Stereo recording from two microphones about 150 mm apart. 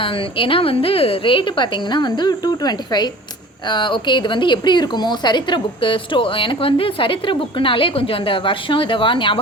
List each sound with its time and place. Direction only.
0.0 s speech: 35° left (ahead or behind)